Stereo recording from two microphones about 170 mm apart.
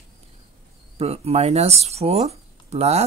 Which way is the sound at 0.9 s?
35° right (ahead or behind).